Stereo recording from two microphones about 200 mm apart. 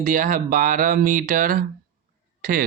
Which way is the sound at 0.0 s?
45° right (ahead or behind).